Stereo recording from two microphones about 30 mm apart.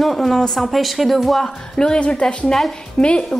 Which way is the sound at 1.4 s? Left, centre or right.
Left.